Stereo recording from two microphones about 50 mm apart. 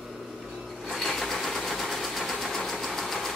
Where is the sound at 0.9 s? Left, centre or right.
Centre.